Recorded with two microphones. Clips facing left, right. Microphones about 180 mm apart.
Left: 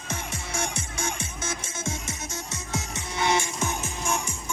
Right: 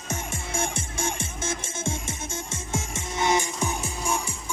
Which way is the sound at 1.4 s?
25° right (ahead or behind).